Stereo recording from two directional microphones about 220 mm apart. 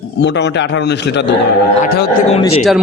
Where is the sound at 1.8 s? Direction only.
45° left (ahead or behind).